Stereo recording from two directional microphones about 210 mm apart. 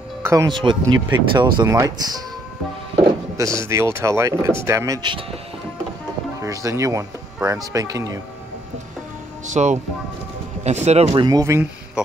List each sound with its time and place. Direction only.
0.2 s speech: 15° right (ahead or behind)
3.3 s speech: 15° right (ahead or behind)
6.4 s speech: 15° right (ahead or behind)
9.5 s speech: 35° right (ahead or behind)
11.2 s speech: 15° right (ahead or behind)